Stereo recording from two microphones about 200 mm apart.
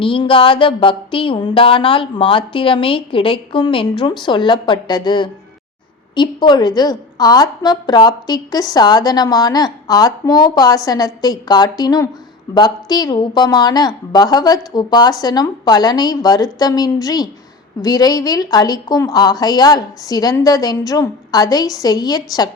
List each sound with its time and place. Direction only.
0.0 s a woman's voice: 25° left (ahead or behind)